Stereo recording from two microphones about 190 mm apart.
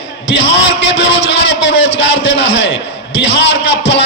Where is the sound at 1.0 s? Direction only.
75° left (ahead or behind).